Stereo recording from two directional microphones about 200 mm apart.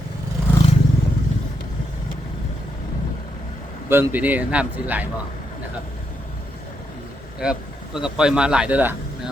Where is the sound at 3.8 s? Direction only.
10° right (ahead or behind).